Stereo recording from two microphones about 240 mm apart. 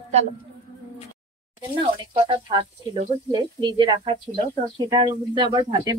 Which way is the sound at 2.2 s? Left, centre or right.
Right.